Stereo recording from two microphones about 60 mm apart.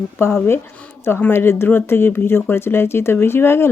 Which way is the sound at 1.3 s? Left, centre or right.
Left.